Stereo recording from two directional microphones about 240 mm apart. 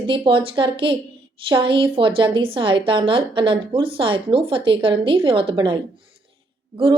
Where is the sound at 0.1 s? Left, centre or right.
Right.